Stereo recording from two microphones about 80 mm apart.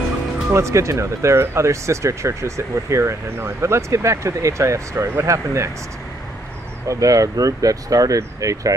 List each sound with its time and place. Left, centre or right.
0.5 s speech: right
6.9 s speech: right